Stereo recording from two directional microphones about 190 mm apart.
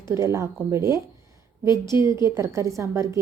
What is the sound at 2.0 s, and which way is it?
A woman's voice, 15° right (ahead or behind).